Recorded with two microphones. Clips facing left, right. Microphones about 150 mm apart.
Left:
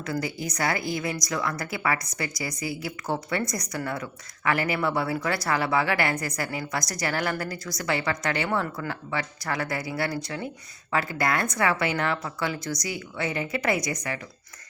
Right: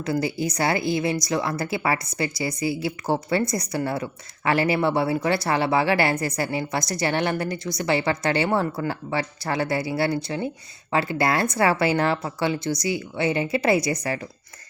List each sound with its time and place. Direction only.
0.0 s a woman's voice: 30° right (ahead or behind)